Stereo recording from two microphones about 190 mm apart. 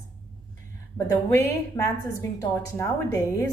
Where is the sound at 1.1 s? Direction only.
10° left (ahead or behind).